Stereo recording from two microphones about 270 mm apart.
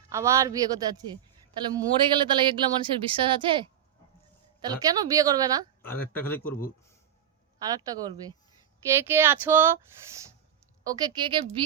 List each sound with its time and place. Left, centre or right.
0.1 s a woman's voice: centre
5.8 s a man's voice: centre
7.7 s a woman's voice: centre
10.8 s a woman's voice: centre